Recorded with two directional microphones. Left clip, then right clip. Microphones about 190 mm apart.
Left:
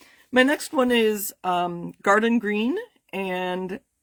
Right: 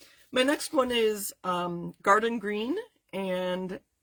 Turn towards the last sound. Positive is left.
turn(degrees=45)  # may be behind; listen again after turning